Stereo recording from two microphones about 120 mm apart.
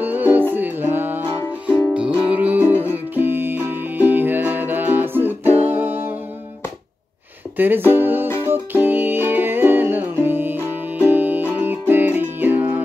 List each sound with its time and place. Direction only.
0.0 s music: 15° right (ahead or behind)
2.6 s music: 20° left (ahead or behind)
2.9 s music: 15° right (ahead or behind)
7.5 s speech: 15° right (ahead or behind)
7.9 s music: 15° right (ahead or behind)